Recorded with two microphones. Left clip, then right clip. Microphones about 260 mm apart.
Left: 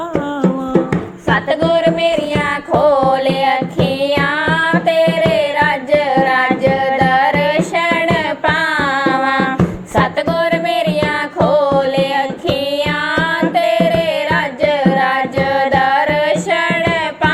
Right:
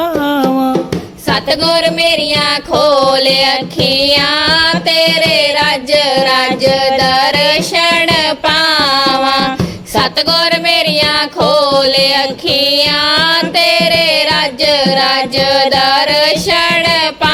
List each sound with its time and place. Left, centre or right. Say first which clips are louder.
1.5 s music: right 3 dB; right